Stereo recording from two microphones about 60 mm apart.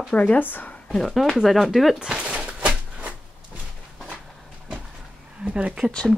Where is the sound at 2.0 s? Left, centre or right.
Centre.